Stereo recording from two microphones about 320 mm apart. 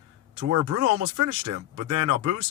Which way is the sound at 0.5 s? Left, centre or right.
Right.